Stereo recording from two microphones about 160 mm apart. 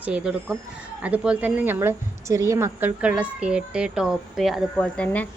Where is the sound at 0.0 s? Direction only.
10° right (ahead or behind).